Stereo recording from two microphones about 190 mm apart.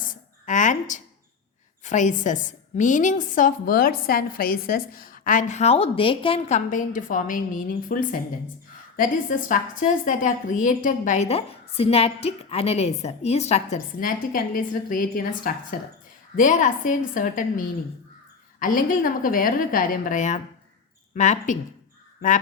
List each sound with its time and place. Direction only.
0.0 s a sound: 45° left (ahead or behind)
1.8 s a woman's voice: 40° left (ahead or behind)
6.7 s a woman's voice: 45° left (ahead or behind)